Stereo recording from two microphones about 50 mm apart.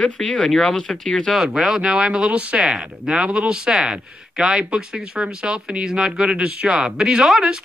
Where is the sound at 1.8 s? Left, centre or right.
Centre.